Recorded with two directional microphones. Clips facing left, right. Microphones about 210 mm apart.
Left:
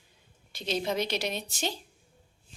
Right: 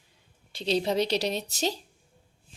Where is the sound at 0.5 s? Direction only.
30° right (ahead or behind).